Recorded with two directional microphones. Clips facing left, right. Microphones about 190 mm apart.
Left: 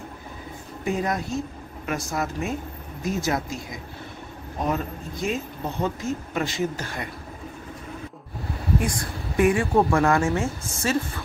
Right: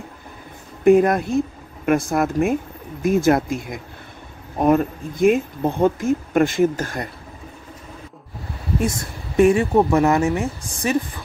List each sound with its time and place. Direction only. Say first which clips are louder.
0.8 s speech: right 12 dB; 55° right (ahead or behind)
8.7 s a woman's voice: right 4 dB; 25° right (ahead or behind)